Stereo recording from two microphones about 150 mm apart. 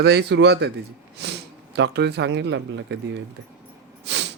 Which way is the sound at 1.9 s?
90° right.